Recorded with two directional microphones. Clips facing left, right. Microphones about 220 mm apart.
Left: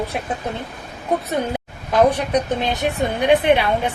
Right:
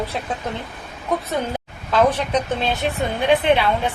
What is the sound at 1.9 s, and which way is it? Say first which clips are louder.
A woman's voice: left 2 dB; 15° left (ahead or behind).